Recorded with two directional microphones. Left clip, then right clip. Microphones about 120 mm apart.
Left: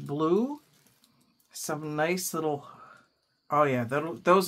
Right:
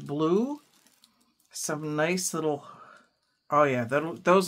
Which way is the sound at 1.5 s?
25° right (ahead or behind).